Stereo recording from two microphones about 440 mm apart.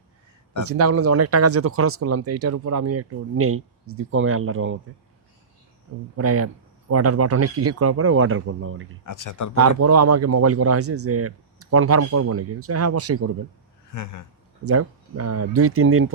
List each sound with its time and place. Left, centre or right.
0.6 s speech: right
6.1 s speech: right
9.0 s speech: left
9.6 s speech: right
13.9 s speech: left
14.6 s speech: right